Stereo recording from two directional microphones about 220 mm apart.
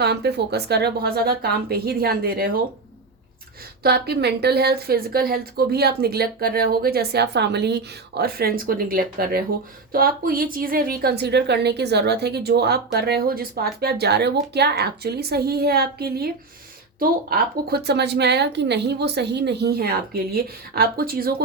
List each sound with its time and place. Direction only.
0.0 s a woman's voice: 50° right (ahead or behind)
3.8 s a woman's voice: 45° right (ahead or behind)